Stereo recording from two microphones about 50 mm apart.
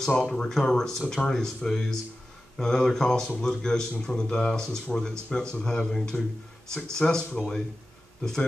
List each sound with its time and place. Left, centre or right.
0.2 s a man's voice: centre